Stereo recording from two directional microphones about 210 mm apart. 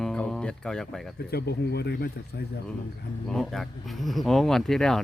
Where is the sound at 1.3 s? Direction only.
50° left (ahead or behind).